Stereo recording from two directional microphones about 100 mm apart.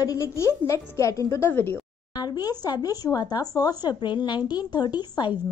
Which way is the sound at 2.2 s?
40° left (ahead or behind).